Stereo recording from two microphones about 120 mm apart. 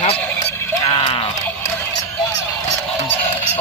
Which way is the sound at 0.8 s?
55° left (ahead or behind).